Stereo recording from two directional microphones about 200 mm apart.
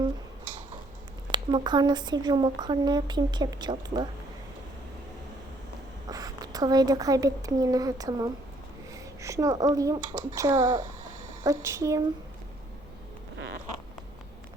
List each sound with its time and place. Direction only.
1.3 s speech: 20° right (ahead or behind)
6.1 s a woman's voice: 15° right (ahead or behind)